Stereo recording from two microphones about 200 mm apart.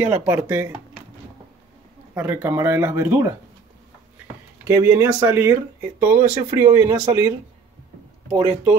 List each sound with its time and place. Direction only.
0.0 s speech: 10° right (ahead or behind)
2.1 s speech: 10° right (ahead or behind)
4.6 s speech: 10° right (ahead or behind)